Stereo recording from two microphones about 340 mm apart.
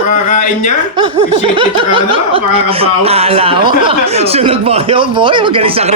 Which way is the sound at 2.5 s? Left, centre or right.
Centre.